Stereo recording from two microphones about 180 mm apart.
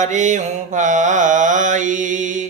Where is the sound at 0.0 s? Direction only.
40° right (ahead or behind).